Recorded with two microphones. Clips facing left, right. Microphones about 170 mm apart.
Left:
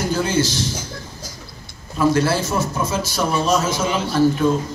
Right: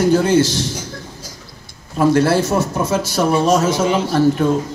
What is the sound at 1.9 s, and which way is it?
A man's voice, 60° right (ahead or behind).